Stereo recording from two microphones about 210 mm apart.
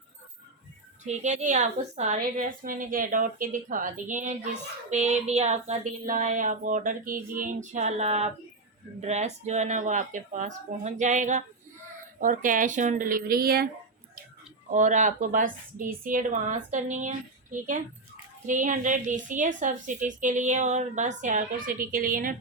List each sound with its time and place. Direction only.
1.0 s speech: 35° right (ahead or behind)
14.7 s speech: 35° right (ahead or behind)